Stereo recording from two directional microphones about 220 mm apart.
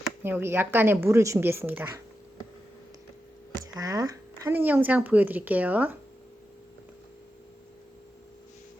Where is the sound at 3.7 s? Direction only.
15° right (ahead or behind).